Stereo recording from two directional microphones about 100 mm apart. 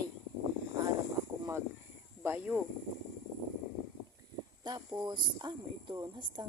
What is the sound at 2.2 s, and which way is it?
Speech, 20° right (ahead or behind).